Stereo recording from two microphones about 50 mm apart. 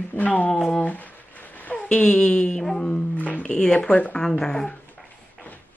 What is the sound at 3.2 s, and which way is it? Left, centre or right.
Speech, left.